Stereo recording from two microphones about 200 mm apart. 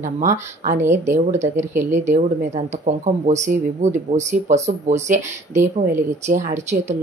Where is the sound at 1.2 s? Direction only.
35° right (ahead or behind).